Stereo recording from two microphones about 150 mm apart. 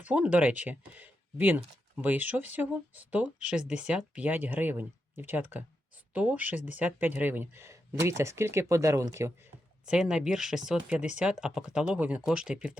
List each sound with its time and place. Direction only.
0.0 s speech: 10° right (ahead or behind)
9.8 s speech: 5° right (ahead or behind)